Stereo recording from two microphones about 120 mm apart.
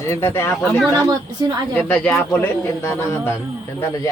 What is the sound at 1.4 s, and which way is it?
Speech, 35° right (ahead or behind).